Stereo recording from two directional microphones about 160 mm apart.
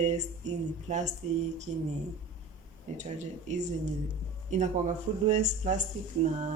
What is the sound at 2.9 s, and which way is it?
Speech, 45° right (ahead or behind).